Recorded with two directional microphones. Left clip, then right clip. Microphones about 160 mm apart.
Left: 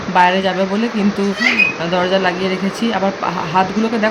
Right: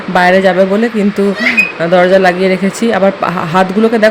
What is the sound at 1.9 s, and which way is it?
Speech, 25° right (ahead or behind).